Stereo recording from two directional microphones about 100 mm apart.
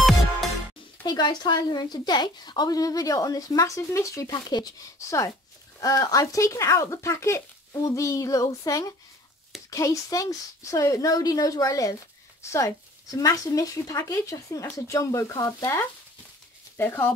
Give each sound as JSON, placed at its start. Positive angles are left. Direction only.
{"t": 1.0, "sound": "a woman's voice", "side_deg": 45}
{"t": 5.8, "sound": "a woman's voice", "side_deg": 40}